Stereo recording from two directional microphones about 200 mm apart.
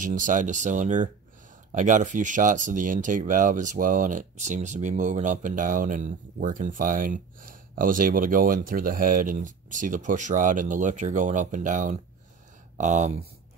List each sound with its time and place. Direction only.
0.0 s speech: 40° right (ahead or behind)